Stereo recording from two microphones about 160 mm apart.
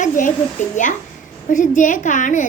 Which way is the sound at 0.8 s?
50° left (ahead or behind).